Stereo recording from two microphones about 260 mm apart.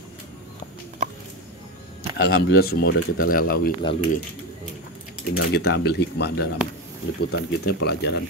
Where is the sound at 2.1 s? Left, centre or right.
Left.